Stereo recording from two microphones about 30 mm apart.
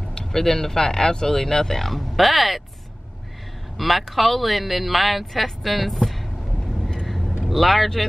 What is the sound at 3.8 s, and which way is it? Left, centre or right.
Speech, centre.